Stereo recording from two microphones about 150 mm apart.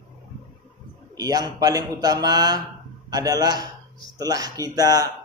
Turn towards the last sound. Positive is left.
turn(degrees=-25)  # may be behind; listen again after turning